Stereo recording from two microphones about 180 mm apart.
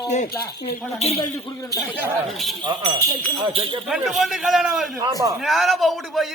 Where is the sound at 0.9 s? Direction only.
35° left (ahead or behind).